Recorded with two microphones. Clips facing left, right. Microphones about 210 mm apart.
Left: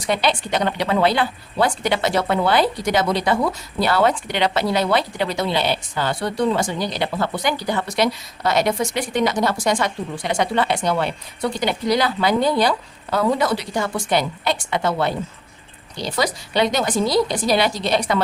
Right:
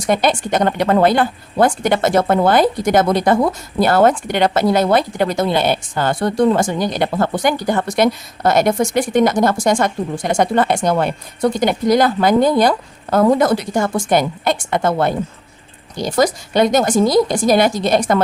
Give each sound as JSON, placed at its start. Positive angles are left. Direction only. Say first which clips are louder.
{"t": 0.0, "sound": "a woman's voice", "louder": "right 5 dB", "side_deg": -45}